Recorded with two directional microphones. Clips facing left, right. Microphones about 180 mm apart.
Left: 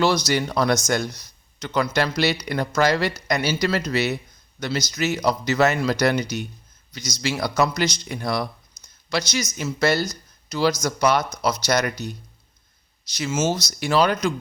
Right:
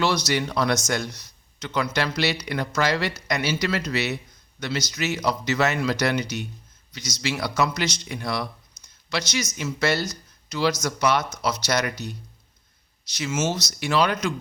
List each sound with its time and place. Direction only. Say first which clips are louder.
0.3 s speech: left 2 dB; 40° left (ahead or behind)